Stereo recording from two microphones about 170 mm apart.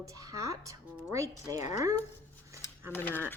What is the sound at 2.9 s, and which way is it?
Speech, 10° left (ahead or behind).